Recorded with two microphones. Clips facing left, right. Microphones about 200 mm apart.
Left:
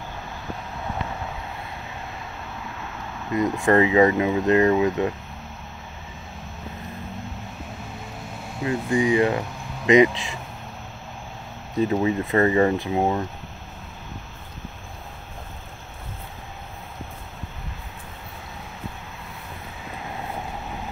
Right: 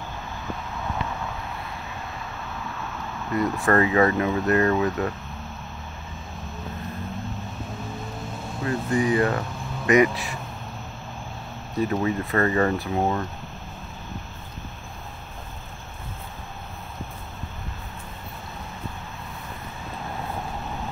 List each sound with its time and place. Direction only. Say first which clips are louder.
3.3 s speech: left 2 dB; 15° left (ahead or behind)
8.6 s speech: left 2 dB; 10° left (ahead or behind)
11.8 s speech: left 3 dB; 20° left (ahead or behind)